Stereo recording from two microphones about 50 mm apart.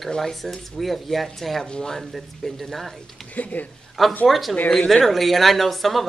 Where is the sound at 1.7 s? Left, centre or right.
Centre.